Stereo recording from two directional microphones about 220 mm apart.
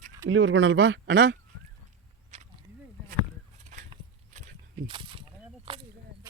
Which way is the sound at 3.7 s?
35° right (ahead or behind).